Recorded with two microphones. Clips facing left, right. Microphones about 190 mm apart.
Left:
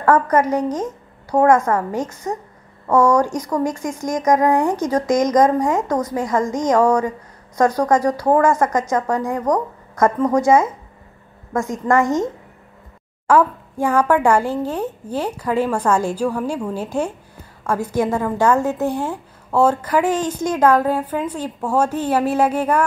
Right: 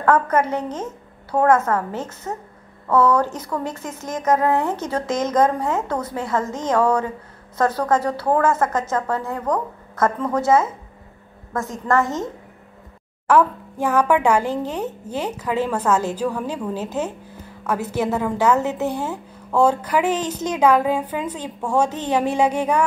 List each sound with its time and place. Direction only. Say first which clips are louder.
0.0 s a woman's voice: left 2 dB; 10° left (ahead or behind)
11.9 s a woman's voice: left 3 dB; 15° left (ahead or behind)
13.3 s a child's voice: left 1 dB; 10° left (ahead or behind)
20.5 s a woman's voice: left 1 dB; 10° right (ahead or behind)
21.2 s a woman's voice: left 3 dB; 10° left (ahead or behind)